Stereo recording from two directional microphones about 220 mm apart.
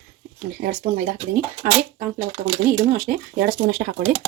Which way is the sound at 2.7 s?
40° right (ahead or behind).